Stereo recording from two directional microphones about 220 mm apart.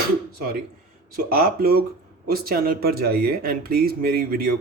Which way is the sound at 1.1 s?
45° right (ahead or behind).